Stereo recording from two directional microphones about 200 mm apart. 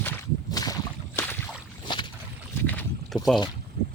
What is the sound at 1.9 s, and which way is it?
Boat, 20° left (ahead or behind).